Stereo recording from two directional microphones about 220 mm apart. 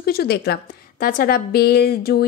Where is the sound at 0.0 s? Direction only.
45° left (ahead or behind).